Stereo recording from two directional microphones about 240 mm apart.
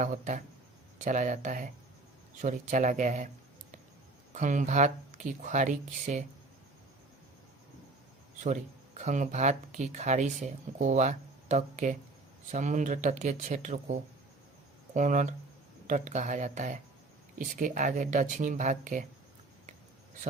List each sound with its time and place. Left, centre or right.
0.0 s speech: right
4.4 s speech: right
9.0 s speech: right
14.9 s speech: right